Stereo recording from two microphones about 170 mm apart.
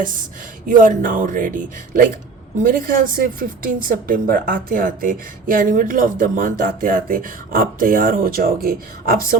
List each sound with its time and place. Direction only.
0.7 s a woman's voice: 50° right (ahead or behind)